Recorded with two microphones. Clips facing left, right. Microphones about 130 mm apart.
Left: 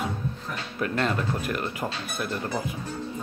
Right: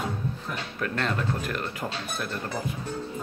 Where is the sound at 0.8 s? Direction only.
5° left (ahead or behind).